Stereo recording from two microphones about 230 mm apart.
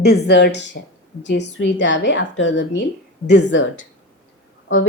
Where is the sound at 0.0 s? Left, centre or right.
Left.